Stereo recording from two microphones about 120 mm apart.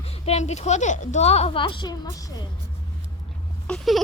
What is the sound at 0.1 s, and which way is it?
Speech, 65° left (ahead or behind).